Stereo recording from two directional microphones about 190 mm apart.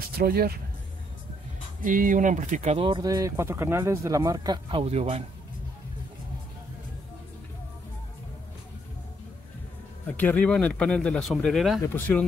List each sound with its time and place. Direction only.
0.2 s speech: 55° right (ahead or behind)
1.9 s speech: 45° right (ahead or behind)
2.9 s speech: 20° right (ahead or behind)
10.1 s speech: 10° left (ahead or behind)